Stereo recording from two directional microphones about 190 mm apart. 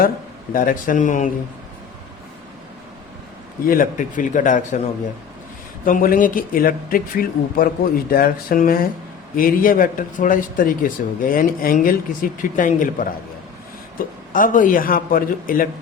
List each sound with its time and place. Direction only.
0.5 s speech: 45° left (ahead or behind)
3.7 s speech: 45° left (ahead or behind)
5.8 s speech: 45° left (ahead or behind)
14.3 s speech: 45° left (ahead or behind)